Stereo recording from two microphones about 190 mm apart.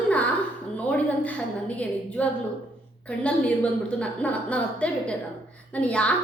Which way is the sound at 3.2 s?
5° left (ahead or behind).